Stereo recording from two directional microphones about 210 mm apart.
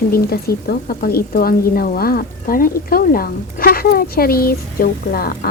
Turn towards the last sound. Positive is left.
turn(degrees=45)  # may be behind; listen again after turning